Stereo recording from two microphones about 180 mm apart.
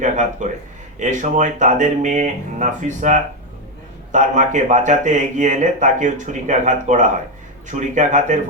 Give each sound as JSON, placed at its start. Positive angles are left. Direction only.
{"t": 0.0, "sound": "speech", "side_deg": -45}